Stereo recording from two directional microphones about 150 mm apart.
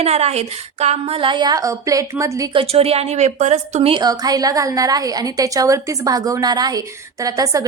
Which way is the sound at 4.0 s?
25° right (ahead or behind).